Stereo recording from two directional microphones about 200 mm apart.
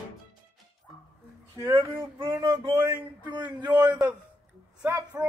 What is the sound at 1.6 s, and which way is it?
Speech, 10° right (ahead or behind).